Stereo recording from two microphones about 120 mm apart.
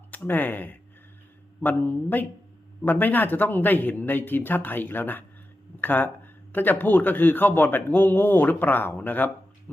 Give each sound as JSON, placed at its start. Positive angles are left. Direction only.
{"t": 0.1, "sound": "a man's voice", "side_deg": 15}